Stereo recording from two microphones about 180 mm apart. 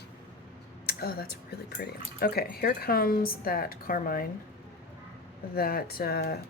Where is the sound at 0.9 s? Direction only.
60° left (ahead or behind).